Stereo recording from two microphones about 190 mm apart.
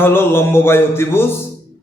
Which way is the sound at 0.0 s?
10° left (ahead or behind).